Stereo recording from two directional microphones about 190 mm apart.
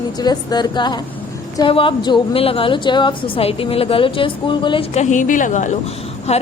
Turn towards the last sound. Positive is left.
turn(degrees=35)  # may be behind; listen again after turning